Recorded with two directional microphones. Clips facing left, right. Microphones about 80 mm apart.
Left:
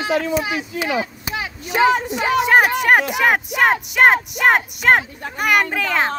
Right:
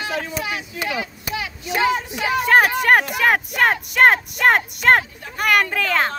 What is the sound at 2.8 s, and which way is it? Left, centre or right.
Speech, centre.